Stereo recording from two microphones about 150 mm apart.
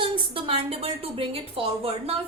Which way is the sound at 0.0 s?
35° right (ahead or behind).